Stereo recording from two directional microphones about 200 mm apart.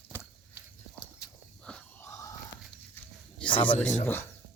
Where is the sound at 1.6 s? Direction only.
5° left (ahead or behind).